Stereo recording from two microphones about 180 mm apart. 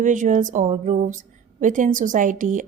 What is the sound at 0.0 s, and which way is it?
A woman's voice, 45° right (ahead or behind).